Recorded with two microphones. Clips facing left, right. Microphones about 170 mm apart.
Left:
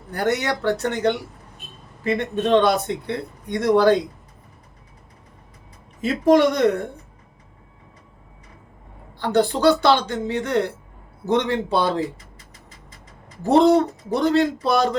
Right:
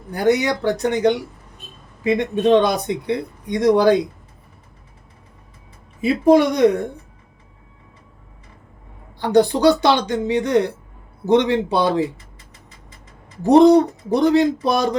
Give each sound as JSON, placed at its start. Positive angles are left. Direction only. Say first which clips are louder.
{"t": 0.1, "sound": "speech", "louder": "right 5 dB", "side_deg": -10}
{"t": 6.0, "sound": "speech", "louder": "right 2 dB", "side_deg": -10}
{"t": 9.1, "sound": "speech", "louder": "right 4 dB", "side_deg": -15}
{"t": 13.4, "sound": "speech", "louder": "right 4 dB", "side_deg": -15}